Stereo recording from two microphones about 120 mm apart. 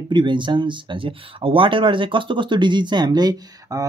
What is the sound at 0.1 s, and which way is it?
Speech, 40° right (ahead or behind).